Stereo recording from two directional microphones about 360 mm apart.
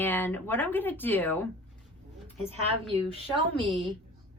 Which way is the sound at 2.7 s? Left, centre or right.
Centre.